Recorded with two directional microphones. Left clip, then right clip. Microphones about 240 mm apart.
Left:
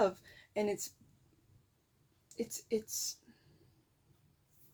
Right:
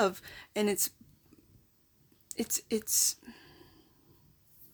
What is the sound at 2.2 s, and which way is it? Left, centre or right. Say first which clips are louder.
Speech: right 5 dB; right.